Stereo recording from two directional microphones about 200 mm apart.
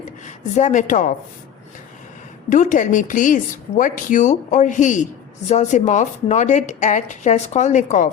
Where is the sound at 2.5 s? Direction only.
40° left (ahead or behind).